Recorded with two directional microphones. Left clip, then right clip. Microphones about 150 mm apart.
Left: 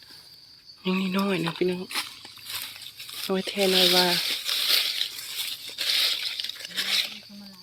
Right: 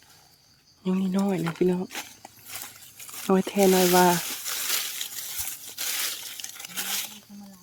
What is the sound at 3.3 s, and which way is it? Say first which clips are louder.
Speech: right 3 dB; 50° right (ahead or behind).